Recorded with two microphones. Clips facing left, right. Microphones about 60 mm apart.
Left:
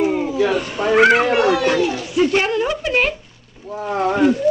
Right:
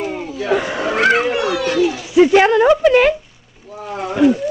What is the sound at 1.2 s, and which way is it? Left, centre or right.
Speech, left.